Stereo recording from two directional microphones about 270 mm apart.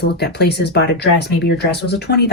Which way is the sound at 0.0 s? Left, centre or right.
Left.